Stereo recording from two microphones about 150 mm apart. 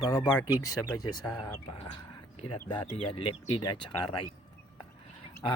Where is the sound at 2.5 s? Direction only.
35° left (ahead or behind).